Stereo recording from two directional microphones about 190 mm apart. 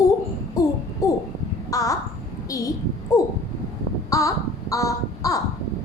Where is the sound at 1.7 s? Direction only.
20° left (ahead or behind).